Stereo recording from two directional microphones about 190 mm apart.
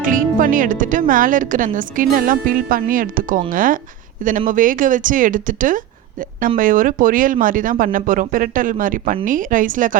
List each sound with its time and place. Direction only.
0.0 s speech: 45° right (ahead or behind)